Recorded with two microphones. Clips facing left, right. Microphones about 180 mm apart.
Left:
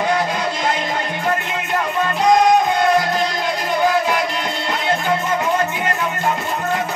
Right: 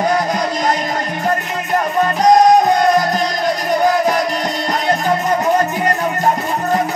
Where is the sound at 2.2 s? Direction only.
40° right (ahead or behind).